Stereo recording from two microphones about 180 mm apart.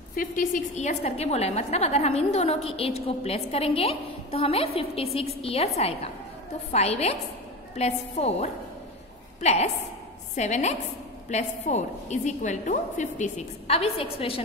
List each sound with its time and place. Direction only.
0.1 s a woman's voice: 50° left (ahead or behind); by 5.7 s 35° left (ahead or behind)
6.7 s a woman's voice: 35° left (ahead or behind)